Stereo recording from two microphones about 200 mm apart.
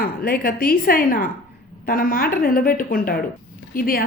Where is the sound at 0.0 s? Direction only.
50° left (ahead or behind).